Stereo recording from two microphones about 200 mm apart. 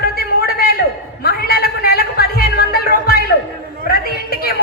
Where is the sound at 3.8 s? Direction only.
50° left (ahead or behind).